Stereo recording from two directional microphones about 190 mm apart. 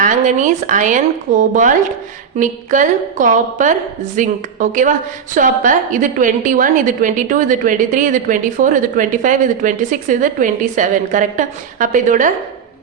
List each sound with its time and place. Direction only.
0.0 s a woman's voice: 40° right (ahead or behind)